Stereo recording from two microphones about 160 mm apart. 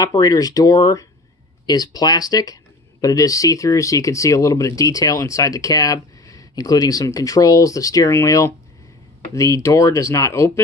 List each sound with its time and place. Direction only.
0.0 s speech: 25° left (ahead or behind)